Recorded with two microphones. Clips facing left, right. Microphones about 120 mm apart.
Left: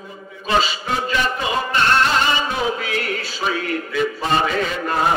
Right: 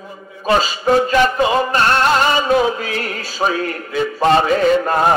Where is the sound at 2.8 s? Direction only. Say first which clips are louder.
Right 1 dB; 40° right (ahead or behind).